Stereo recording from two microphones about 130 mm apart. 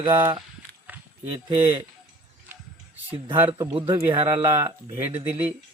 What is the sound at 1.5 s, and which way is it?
Speech, 15° right (ahead or behind).